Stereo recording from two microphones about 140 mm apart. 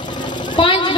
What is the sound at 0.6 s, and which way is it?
Speech, 35° left (ahead or behind).